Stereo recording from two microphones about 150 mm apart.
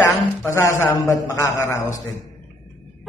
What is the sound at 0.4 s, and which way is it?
A man's voice, 20° left (ahead or behind).